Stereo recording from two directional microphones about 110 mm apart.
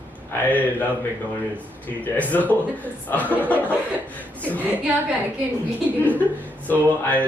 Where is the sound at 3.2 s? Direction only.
15° right (ahead or behind).